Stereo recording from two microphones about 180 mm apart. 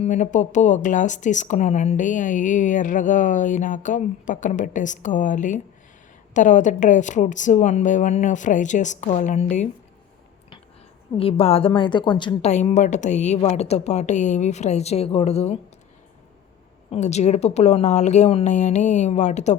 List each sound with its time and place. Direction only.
0.0 s speech: 40° left (ahead or behind)
11.2 s a woman's voice: 30° left (ahead or behind)
12.5 s a woman's voice: 40° left (ahead or behind)
16.9 s a woman's voice: 40° left (ahead or behind)